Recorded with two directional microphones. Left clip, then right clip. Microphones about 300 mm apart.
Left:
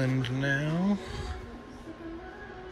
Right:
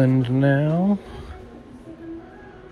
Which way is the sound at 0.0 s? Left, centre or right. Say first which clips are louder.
Right 10 dB; centre.